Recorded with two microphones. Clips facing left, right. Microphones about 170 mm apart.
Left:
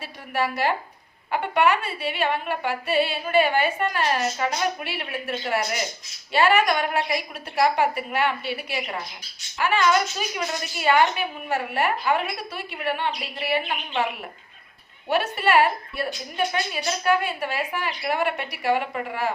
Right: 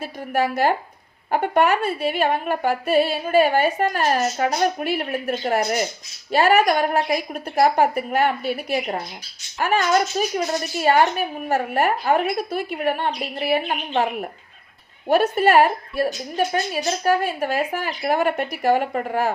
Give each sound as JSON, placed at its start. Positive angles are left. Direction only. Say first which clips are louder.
{"t": 0.0, "sound": "speech", "louder": "right 4 dB", "side_deg": -45}